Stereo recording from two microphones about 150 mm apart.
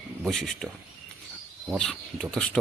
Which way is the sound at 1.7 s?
5° left (ahead or behind).